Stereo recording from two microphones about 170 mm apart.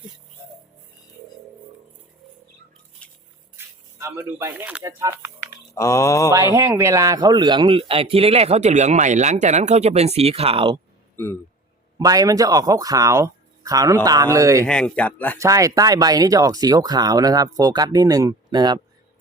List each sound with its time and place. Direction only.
3.0 s a sound: 5° left (ahead or behind)
3.6 s a sound: 15° right (ahead or behind)
3.9 s speech: 15° right (ahead or behind)
5.7 s speech: 20° left (ahead or behind)
6.3 s speech: 15° right (ahead or behind); by 10.8 s 30° right (ahead or behind)
11.2 s speech: 10° left (ahead or behind)
11.9 s speech: 20° right (ahead or behind)
14.6 s speech: 5° left (ahead or behind)
15.4 s speech: 20° right (ahead or behind)